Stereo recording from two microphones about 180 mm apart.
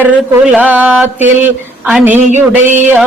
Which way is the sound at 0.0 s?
10° right (ahead or behind).